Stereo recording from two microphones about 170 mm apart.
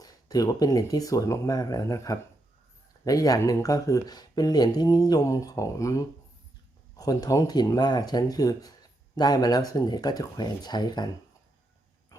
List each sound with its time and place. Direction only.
0.0 s speech: 20° left (ahead or behind)